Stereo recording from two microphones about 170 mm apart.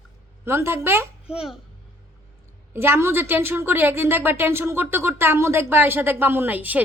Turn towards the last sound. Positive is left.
turn(degrees=-10)  # may be behind; listen again after turning